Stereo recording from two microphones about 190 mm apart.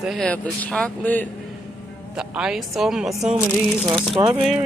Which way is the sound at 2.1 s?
5° right (ahead or behind).